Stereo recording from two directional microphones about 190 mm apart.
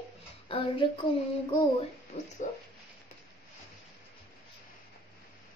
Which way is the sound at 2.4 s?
40° left (ahead or behind).